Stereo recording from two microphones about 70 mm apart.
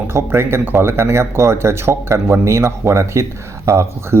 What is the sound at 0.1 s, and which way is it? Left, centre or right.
Speech, right.